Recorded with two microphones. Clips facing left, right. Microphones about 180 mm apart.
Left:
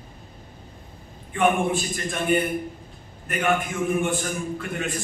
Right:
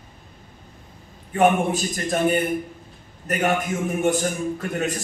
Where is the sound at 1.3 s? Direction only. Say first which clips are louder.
Right 3 dB; 40° right (ahead or behind).